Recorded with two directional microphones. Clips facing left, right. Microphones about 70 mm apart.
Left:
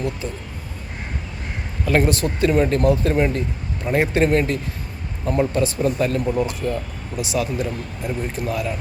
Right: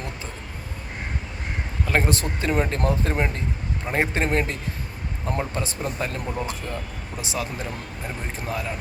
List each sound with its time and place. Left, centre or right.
1.8 s speech: right